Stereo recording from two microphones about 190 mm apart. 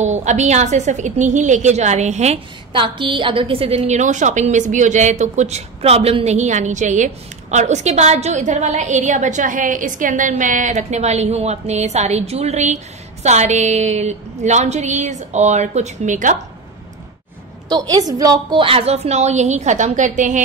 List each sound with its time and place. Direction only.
0.0 s a woman's voice: 40° right (ahead or behind)
17.6 s a woman's voice: 20° right (ahead or behind); by 20.4 s 40° right (ahead or behind)